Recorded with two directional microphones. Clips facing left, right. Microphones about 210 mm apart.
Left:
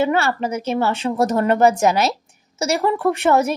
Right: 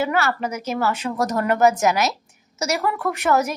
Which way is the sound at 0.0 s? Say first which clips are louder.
Left 3 dB; 25° left (ahead or behind).